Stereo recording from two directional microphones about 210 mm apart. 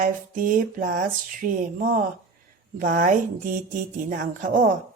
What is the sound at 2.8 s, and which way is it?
Speech, 40° right (ahead or behind).